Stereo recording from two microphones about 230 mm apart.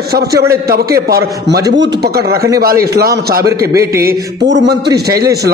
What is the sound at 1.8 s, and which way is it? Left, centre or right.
A man's voice, right.